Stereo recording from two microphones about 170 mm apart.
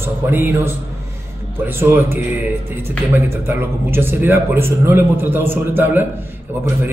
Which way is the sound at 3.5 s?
15° right (ahead or behind).